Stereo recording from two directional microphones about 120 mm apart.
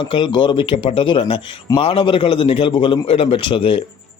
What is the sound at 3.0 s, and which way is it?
Speech, 55° left (ahead or behind).